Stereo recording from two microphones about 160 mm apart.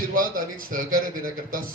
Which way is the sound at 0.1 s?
60° right (ahead or behind).